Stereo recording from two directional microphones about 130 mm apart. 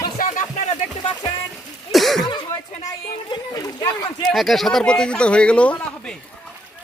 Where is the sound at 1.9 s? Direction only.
Centre (ahead or behind).